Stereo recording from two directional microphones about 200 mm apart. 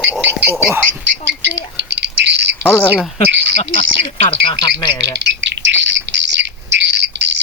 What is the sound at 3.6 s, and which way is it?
Speech, 35° left (ahead or behind).